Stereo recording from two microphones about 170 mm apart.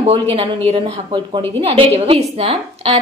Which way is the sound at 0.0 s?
35° right (ahead or behind).